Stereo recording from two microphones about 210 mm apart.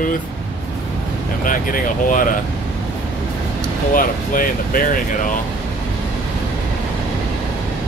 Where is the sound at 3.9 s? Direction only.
40° left (ahead or behind).